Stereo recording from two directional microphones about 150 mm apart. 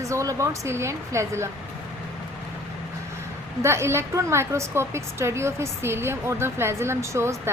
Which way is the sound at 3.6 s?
15° right (ahead or behind).